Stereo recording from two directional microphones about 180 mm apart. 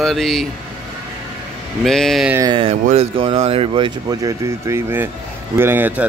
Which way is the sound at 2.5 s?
30° right (ahead or behind).